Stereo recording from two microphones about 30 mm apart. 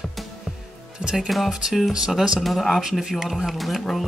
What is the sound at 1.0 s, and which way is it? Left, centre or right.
Music, right.